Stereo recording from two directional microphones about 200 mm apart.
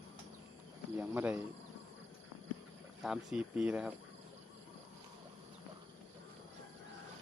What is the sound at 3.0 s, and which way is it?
Speech, 5° right (ahead or behind).